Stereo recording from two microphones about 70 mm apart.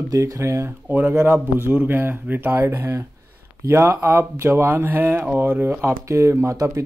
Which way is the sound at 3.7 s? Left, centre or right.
Right.